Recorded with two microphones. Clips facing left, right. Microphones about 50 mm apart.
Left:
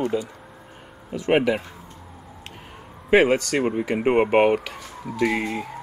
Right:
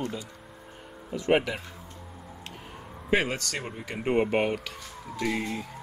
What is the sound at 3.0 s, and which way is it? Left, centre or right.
A man's voice, left.